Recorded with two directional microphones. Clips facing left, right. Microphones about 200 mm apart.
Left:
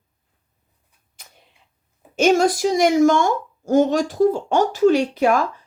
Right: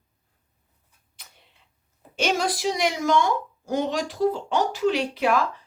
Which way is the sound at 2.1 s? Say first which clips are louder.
Left 9 dB; 45° left (ahead or behind).